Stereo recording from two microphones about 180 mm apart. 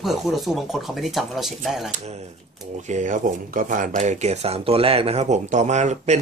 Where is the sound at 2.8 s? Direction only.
45° right (ahead or behind).